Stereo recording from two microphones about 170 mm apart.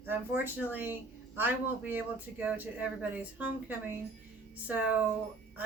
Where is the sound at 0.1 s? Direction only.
10° right (ahead or behind).